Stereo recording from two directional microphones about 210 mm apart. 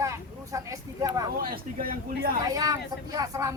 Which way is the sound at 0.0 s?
15° right (ahead or behind).